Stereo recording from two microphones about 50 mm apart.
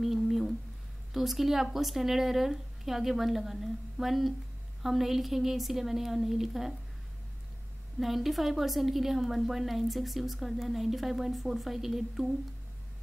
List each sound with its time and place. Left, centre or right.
0.0 s a sound: centre
1.1 s a woman's voice: centre
8.0 s a woman's voice: centre